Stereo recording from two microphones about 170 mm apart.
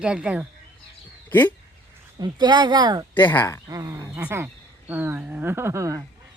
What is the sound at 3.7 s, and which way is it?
Speech, 20° right (ahead or behind).